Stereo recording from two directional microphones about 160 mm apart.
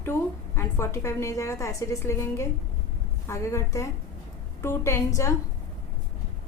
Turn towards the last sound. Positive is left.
turn(degrees=15)  # may be behind; listen again after turning